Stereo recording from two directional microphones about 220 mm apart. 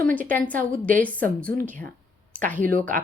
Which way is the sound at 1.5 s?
40° right (ahead or behind).